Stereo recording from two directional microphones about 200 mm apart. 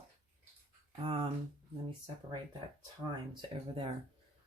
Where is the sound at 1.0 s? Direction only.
25° right (ahead or behind).